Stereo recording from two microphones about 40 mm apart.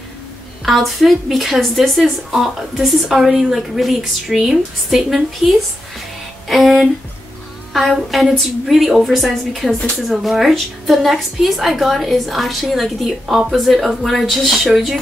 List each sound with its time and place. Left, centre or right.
0.7 s a woman's voice: centre
9.7 s speech: centre
10.0 s a woman's voice: centre